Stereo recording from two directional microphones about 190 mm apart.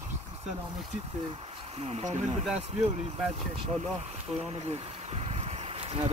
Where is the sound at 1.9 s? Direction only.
35° right (ahead or behind).